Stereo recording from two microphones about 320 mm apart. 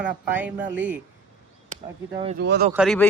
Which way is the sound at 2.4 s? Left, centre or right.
Right.